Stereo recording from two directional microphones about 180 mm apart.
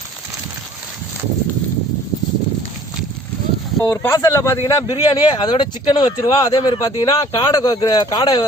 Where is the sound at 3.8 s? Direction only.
15° left (ahead or behind).